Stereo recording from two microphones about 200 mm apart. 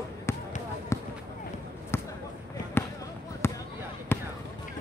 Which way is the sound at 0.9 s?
15° left (ahead or behind).